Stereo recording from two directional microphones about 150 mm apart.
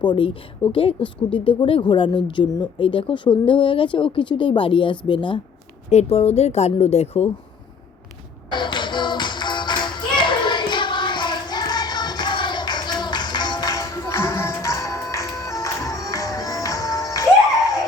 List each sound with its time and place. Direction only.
0.0 s speech: 35° left (ahead or behind)
5.9 s a woman's voice: 45° left (ahead or behind)
8.4 s music: 30° left (ahead or behind)